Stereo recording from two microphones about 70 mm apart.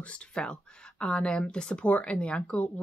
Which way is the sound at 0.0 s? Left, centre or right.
Centre.